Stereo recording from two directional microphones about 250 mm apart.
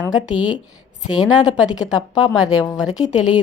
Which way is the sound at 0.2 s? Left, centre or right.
Centre.